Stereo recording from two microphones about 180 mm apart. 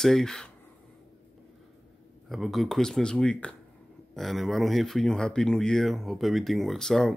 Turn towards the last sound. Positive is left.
turn(degrees=0)  # may be behind; listen again after turning